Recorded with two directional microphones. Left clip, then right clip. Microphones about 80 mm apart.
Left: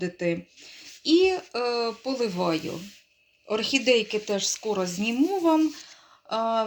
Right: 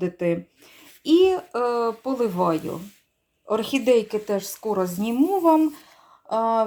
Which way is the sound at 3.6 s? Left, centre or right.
Right.